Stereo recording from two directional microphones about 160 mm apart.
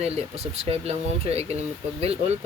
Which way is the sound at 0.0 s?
40° right (ahead or behind).